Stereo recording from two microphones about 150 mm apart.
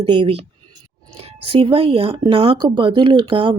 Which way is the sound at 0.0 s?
35° right (ahead or behind).